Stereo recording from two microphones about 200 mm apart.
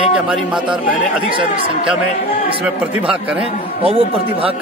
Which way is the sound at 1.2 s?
25° right (ahead or behind).